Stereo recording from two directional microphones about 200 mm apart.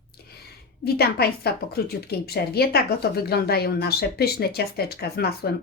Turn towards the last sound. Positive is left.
turn(degrees=50)  # may be behind; listen again after turning